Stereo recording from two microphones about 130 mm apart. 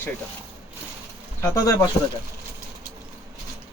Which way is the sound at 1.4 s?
30° left (ahead or behind).